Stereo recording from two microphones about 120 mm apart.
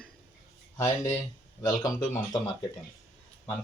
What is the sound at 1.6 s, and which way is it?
Speech, 35° left (ahead or behind).